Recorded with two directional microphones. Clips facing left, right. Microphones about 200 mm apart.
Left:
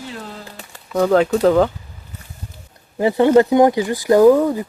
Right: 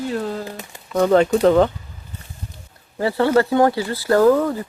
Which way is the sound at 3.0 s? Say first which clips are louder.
Left 4 dB; 15° left (ahead or behind).